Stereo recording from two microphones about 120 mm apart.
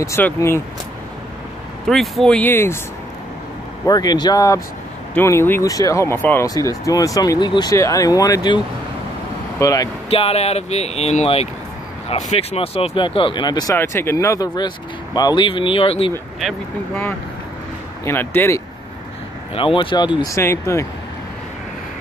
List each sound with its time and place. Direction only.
0.2 s speech: 15° left (ahead or behind)
1.9 s speech: centre (ahead or behind)
2.5 s speech: 20° left (ahead or behind)
3.8 s speech: 35° left (ahead or behind)
5.1 s speech: 20° left (ahead or behind); by 7.7 s 40° left (ahead or behind)
7.7 s speech: 25° left (ahead or behind)
9.6 s speech: 30° left (ahead or behind)
10.0 s speech: 55° left (ahead or behind); by 13.7 s 35° left (ahead or behind)
13.7 s speech: 20° left (ahead or behind)
15.4 s speech: 45° left (ahead or behind)
18.0 s speech: 20° left (ahead or behind)
19.5 s speech: 45° left (ahead or behind)
20.3 s speech: 25° left (ahead or behind)